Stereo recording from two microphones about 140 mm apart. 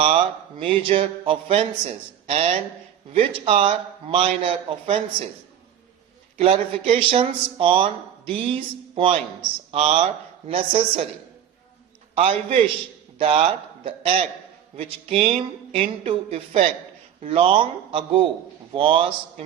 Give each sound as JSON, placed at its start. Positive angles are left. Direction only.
{"t": 0.6, "sound": "a man's voice", "side_deg": -40}
{"t": 6.4, "sound": "a man's voice", "side_deg": -45}
{"t": 12.1, "sound": "a man's voice", "side_deg": -45}